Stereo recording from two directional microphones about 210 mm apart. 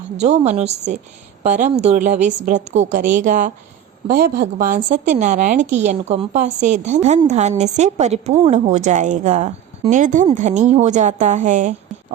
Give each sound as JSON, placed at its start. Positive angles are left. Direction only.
{"t": 0.2, "sound": "a woman's voice", "side_deg": -35}
{"t": 4.1, "sound": "a woman's voice", "side_deg": -50}